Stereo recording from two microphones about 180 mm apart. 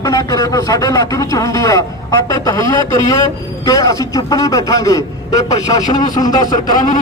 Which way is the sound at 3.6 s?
20° left (ahead or behind).